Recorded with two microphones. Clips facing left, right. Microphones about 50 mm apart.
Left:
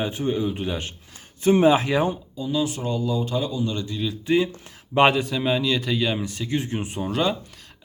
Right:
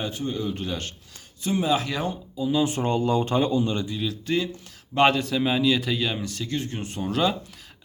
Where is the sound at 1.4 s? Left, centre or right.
Left.